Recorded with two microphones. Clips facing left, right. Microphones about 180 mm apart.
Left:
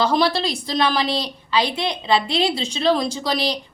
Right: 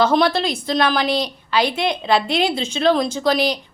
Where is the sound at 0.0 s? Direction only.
Centre (ahead or behind).